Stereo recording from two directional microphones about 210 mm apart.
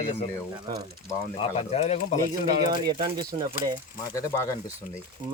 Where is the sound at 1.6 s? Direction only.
30° left (ahead or behind).